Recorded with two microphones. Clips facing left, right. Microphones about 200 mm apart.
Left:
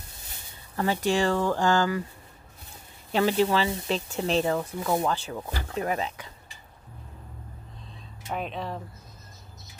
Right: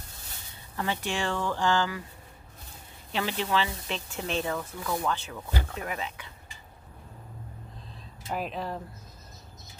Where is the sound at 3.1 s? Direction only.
40° left (ahead or behind).